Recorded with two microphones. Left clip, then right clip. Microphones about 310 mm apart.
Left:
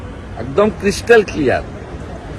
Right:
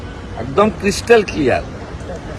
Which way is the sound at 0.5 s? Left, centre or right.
Centre.